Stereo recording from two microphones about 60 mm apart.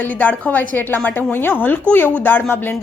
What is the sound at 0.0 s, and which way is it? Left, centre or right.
A woman's voice, left.